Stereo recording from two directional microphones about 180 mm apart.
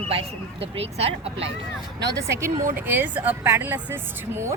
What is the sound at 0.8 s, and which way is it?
Speech, 35° right (ahead or behind).